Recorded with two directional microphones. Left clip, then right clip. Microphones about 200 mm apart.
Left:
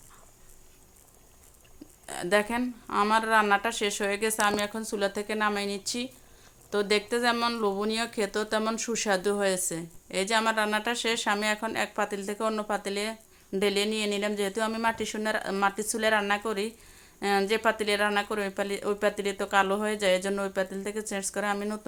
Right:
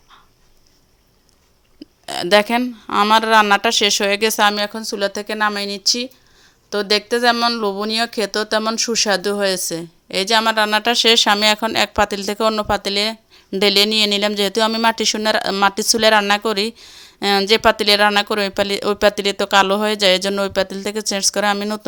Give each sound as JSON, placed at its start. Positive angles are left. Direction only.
{"t": 2.0, "sound": "speech", "side_deg": -45}